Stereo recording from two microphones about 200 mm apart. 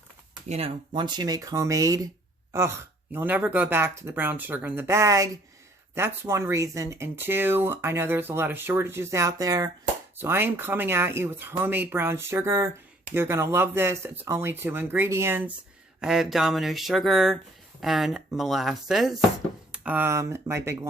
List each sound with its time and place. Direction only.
0.4 s speech: 30° right (ahead or behind); by 20.7 s 15° right (ahead or behind)